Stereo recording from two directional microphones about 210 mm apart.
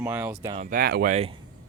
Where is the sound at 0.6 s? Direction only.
45° right (ahead or behind).